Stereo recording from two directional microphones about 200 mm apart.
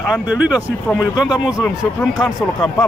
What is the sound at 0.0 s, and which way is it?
Speech, 5° right (ahead or behind).